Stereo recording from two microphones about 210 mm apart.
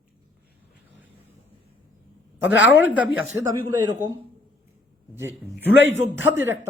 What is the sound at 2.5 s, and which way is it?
Speech, 60° left (ahead or behind).